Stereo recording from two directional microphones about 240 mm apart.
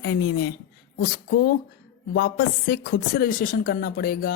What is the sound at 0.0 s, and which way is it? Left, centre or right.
Speech, left.